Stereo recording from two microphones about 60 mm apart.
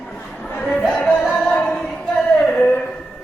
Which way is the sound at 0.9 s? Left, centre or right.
Centre.